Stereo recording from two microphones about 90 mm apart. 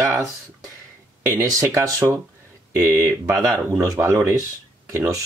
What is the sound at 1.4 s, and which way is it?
Speech, 35° right (ahead or behind).